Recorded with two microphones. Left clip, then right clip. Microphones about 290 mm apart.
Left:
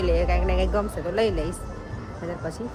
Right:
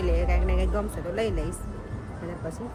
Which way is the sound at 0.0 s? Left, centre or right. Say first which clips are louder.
Left 5 dB; centre.